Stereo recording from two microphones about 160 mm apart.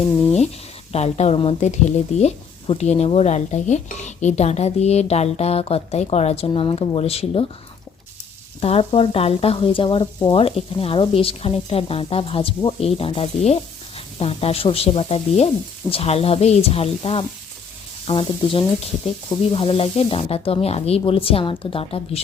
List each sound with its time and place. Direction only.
0.9 s speech: 40° left (ahead or behind)
8.6 s speech: 35° left (ahead or behind)